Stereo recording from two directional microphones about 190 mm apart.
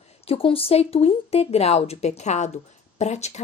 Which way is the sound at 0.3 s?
30° left (ahead or behind).